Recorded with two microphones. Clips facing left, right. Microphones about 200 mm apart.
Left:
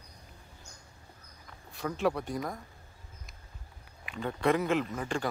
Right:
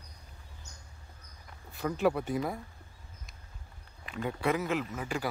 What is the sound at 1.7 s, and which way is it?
Speech, centre (ahead or behind).